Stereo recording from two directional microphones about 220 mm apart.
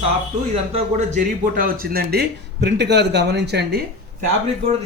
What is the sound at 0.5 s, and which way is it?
Speech, 30° right (ahead or behind).